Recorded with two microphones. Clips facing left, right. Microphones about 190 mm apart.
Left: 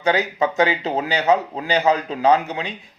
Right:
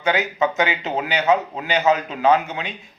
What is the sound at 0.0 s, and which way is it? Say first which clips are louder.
Speech: left 1 dB; 35° left (ahead or behind).